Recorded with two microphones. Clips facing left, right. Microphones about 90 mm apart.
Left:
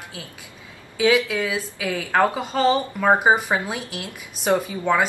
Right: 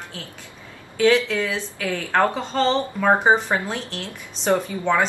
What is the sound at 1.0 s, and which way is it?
Speech, 10° left (ahead or behind).